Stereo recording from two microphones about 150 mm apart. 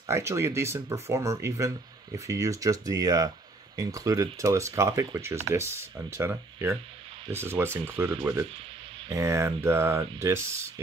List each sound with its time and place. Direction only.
0.0 s speech: 20° right (ahead or behind)